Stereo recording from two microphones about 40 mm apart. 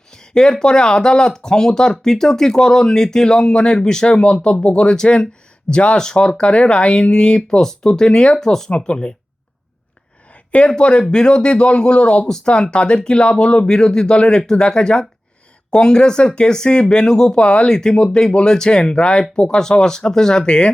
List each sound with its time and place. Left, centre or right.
0.1 s speech: centre
7.6 s speech: centre
8.7 s speech: left
10.7 s speech: left
17.3 s speech: left